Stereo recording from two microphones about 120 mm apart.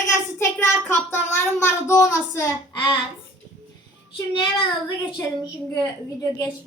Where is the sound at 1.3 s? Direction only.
20° left (ahead or behind).